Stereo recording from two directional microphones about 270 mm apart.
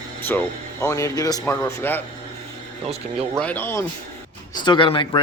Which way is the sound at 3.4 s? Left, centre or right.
Centre.